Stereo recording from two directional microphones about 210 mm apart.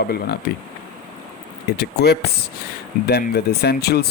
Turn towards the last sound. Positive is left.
turn(degrees=50)  # may be behind; listen again after turning